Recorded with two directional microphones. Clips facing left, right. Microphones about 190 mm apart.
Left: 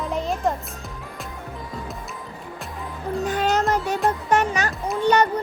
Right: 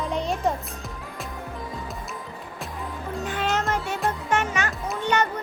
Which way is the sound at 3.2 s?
40° left (ahead or behind).